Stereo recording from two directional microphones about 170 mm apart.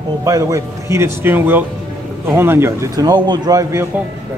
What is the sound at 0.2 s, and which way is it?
A man's voice, 20° right (ahead or behind).